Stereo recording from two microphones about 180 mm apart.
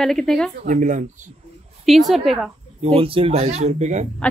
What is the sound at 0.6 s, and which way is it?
Speech, 45° right (ahead or behind).